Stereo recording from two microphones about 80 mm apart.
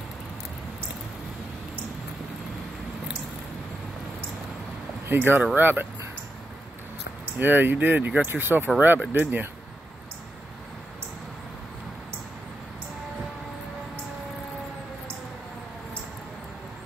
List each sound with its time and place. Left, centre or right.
5.0 s speech: right
7.3 s speech: right